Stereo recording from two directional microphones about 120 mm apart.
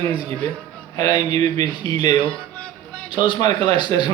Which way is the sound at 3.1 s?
40° left (ahead or behind).